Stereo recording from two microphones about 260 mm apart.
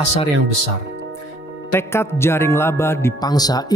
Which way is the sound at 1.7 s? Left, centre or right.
Centre.